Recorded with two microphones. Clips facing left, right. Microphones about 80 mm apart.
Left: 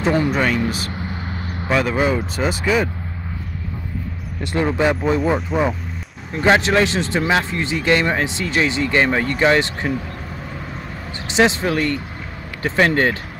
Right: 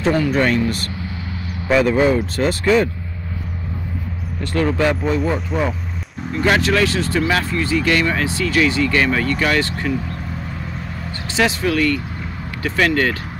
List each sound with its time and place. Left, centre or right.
0.3 s speech: centre
4.4 s speech: centre
6.4 s speech: left
11.2 s speech: left